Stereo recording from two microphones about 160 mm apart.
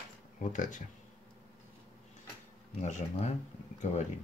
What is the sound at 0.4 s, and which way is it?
Speech, 55° left (ahead or behind).